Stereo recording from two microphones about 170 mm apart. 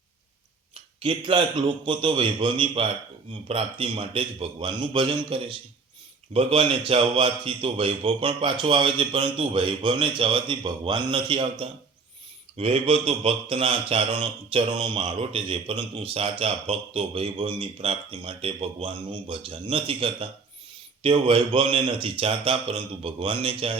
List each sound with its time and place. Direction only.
1.0 s speech: 30° right (ahead or behind)
12.5 s speech: 35° right (ahead or behind)